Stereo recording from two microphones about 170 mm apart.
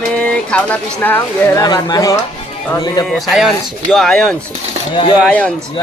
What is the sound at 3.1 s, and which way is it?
Speech, centre (ahead or behind).